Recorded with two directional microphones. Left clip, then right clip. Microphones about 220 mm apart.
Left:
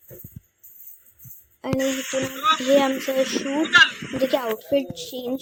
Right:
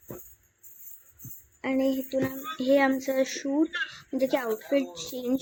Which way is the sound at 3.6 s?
45° left (ahead or behind).